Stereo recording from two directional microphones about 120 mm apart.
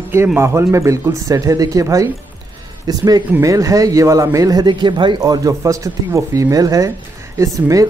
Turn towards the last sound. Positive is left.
turn(degrees=-30)  # may be behind; listen again after turning